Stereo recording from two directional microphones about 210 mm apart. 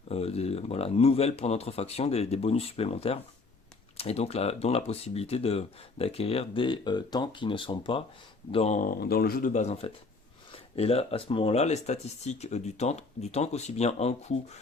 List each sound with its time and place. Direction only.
0.1 s speech: 30° left (ahead or behind)